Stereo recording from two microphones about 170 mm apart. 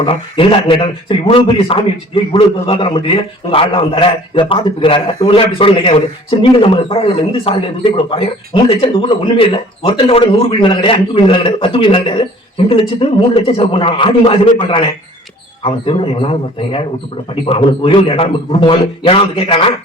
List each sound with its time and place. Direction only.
0.0 s a man's voice: 30° left (ahead or behind)